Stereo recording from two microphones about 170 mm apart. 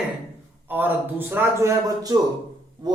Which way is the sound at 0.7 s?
10° right (ahead or behind).